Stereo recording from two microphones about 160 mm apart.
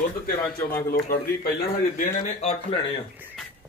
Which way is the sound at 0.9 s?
70° left (ahead or behind).